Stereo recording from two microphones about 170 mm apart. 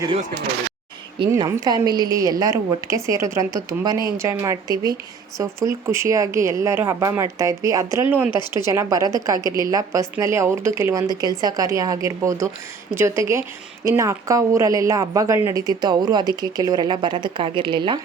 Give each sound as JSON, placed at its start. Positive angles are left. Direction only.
{"t": 1.3, "sound": "a woman's voice", "side_deg": -20}